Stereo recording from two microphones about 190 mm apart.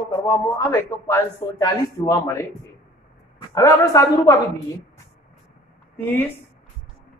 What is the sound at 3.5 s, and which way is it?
Speech, 15° left (ahead or behind).